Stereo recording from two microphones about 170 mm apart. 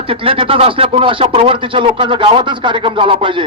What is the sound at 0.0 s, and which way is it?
Speech, 30° right (ahead or behind).